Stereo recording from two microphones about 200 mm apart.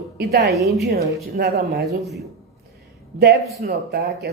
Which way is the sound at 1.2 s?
50° right (ahead or behind).